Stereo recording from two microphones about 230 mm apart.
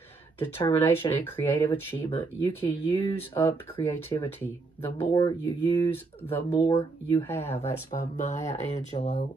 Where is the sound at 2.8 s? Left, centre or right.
Left.